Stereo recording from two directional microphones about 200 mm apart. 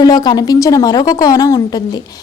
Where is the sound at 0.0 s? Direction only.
20° left (ahead or behind).